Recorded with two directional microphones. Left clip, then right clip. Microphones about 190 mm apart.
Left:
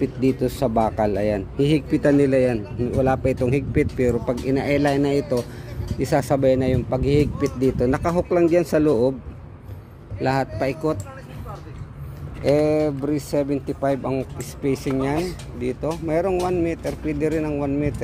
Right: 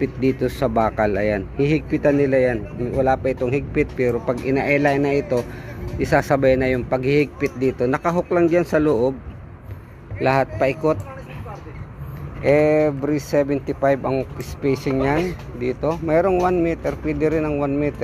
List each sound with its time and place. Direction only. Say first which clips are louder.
0.0 s speech: right 1 dB; 25° left (ahead or behind)
10.2 s speech: right 4 dB; 25° left (ahead or behind)
12.4 s speech: right 3 dB; 30° left (ahead or behind)